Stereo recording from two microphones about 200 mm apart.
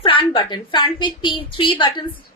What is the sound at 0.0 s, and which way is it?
A woman's voice, 25° left (ahead or behind).